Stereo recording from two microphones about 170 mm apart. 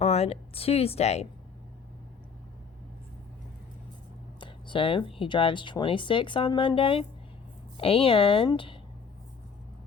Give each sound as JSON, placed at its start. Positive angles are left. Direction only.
{"t": 0.0, "sound": "speech", "side_deg": 35}
{"t": 4.4, "sound": "speech", "side_deg": 30}